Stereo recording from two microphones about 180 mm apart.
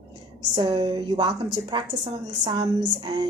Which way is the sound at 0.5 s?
25° right (ahead or behind).